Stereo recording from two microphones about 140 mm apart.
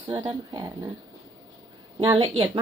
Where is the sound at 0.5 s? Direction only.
30° right (ahead or behind).